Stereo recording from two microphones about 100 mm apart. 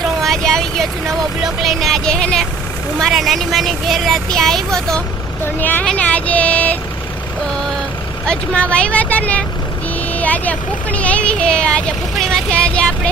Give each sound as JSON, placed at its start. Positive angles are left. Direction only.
{"t": 0.0, "sound": "vehicle", "side_deg": 5}
{"t": 3.0, "sound": "speech", "side_deg": 0}
{"t": 5.5, "sound": "speech", "side_deg": 20}
{"t": 8.3, "sound": "speech", "side_deg": 10}